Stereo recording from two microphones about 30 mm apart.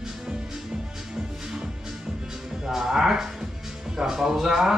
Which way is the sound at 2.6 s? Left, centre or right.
Centre.